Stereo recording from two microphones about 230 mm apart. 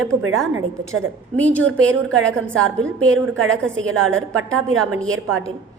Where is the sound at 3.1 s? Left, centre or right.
Right.